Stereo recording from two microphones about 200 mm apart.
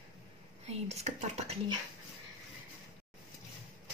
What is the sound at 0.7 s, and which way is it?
Whispering, 30° right (ahead or behind).